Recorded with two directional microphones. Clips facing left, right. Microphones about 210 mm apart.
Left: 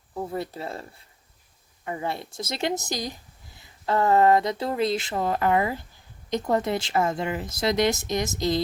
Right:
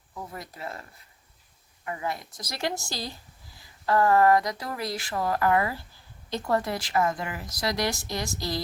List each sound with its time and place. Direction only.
0.1 s speech: 30° left (ahead or behind)